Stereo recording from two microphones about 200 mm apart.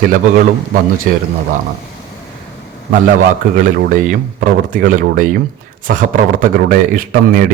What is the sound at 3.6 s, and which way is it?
A man's voice, 40° right (ahead or behind).